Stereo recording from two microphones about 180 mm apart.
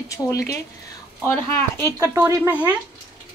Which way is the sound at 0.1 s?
15° left (ahead or behind).